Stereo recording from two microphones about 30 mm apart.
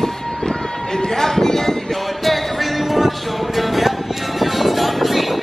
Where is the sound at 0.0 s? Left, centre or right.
Left.